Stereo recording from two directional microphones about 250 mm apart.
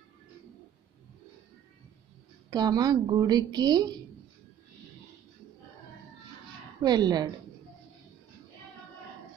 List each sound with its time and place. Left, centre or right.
2.5 s a woman's voice: centre
6.8 s a woman's voice: centre